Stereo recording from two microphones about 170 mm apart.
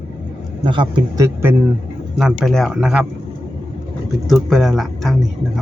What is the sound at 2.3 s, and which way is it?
Speech, 5° left (ahead or behind).